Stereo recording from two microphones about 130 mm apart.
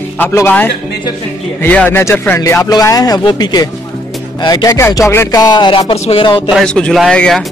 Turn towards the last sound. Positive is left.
turn(degrees=5)  # may be behind; listen again after turning